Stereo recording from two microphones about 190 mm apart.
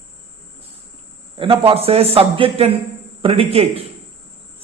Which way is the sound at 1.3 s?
30° right (ahead or behind).